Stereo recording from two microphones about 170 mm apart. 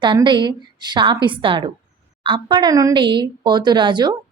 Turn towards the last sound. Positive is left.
turn(degrees=-25)  # may be behind; listen again after turning